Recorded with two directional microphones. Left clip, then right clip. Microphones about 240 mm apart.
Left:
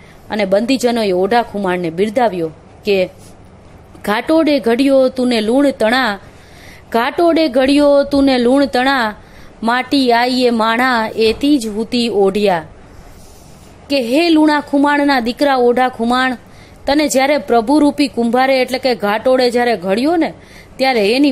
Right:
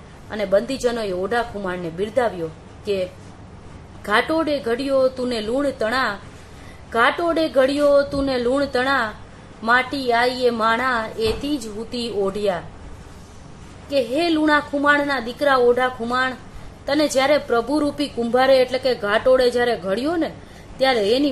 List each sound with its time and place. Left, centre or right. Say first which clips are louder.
0.3 s a woman's voice: left 6 dB; left
13.8 s a woman's voice: left 6 dB; left